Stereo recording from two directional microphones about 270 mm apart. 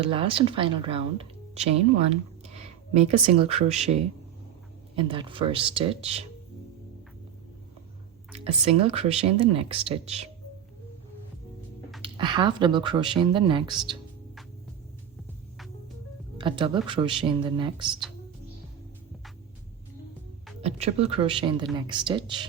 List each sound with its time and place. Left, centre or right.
0.0 s speech: centre
4.9 s speech: centre
8.4 s speech: right
12.0 s speech: centre
16.4 s speech: centre
20.6 s speech: right